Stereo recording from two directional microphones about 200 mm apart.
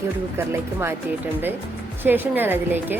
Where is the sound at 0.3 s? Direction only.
10° right (ahead or behind).